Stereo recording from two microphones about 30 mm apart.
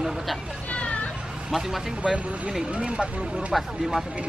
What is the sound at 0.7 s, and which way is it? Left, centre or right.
Vehicle, left.